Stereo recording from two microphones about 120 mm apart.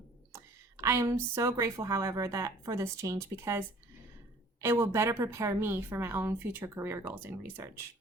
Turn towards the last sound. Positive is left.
turn(degrees=-20)  # may be behind; listen again after turning